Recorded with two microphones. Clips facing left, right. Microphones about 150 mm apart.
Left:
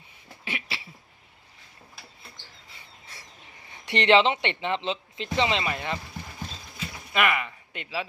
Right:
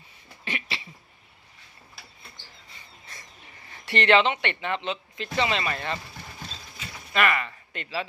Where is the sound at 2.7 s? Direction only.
10° left (ahead or behind).